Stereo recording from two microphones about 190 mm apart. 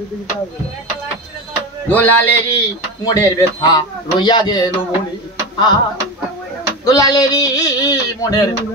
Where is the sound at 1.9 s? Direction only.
10° left (ahead or behind).